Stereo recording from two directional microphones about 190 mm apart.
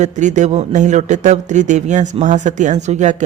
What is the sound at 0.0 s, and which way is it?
Speech, 40° right (ahead or behind).